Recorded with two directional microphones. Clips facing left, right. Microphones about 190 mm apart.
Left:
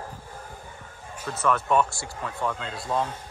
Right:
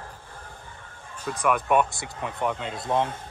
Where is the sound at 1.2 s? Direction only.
15° right (ahead or behind).